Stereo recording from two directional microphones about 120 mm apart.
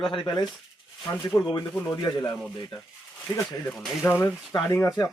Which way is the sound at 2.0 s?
35° left (ahead or behind).